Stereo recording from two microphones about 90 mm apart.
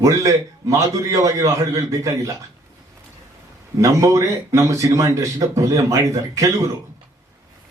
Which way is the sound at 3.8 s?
40° right (ahead or behind).